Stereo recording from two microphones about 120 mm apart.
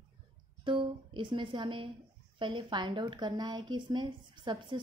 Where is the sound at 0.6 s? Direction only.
45° right (ahead or behind).